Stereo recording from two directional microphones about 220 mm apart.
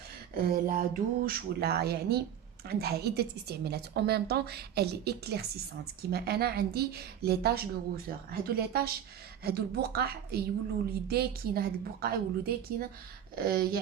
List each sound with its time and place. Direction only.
0.3 s a woman's voice: 40° right (ahead or behind)